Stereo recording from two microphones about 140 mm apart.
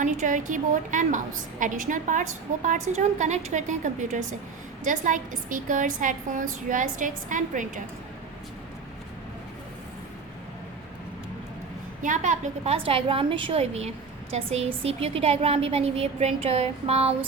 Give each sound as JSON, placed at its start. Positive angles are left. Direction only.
{"t": 0.0, "sound": "a woman's voice", "side_deg": -65}
{"t": 12.0, "sound": "a woman's voice", "side_deg": -65}
{"t": 12.7, "sound": "a woman's voice", "side_deg": -40}